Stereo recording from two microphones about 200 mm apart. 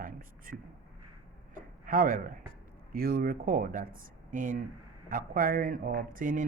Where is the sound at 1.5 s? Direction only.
45° right (ahead or behind).